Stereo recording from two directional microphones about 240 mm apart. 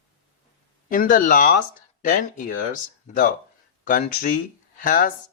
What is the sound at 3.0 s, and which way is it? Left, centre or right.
Speech, left.